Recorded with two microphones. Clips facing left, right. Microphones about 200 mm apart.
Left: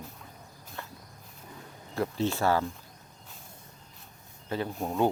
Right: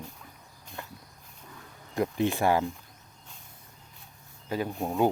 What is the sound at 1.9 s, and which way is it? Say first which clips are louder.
Speech: right 2 dB; 15° right (ahead or behind).